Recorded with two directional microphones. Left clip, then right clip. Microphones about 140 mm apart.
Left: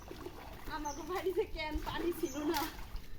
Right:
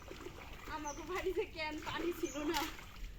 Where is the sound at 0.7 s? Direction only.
15° left (ahead or behind).